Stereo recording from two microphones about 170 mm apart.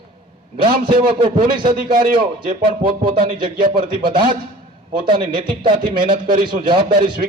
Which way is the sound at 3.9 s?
30° right (ahead or behind).